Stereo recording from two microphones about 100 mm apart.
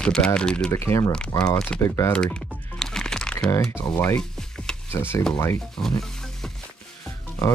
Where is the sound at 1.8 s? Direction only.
30° left (ahead or behind).